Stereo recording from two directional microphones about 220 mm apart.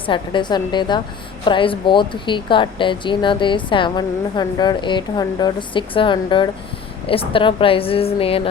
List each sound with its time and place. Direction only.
0.0 s speech: 20° left (ahead or behind)